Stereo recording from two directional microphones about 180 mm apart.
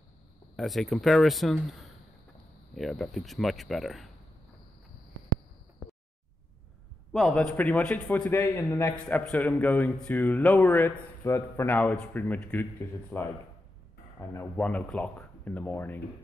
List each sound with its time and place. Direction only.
0.6 s speech: centre (ahead or behind)
7.1 s a man's voice: centre (ahead or behind)